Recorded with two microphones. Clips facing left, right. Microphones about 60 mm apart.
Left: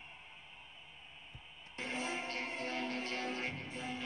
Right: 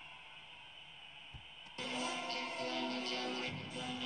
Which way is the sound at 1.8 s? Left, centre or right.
Left.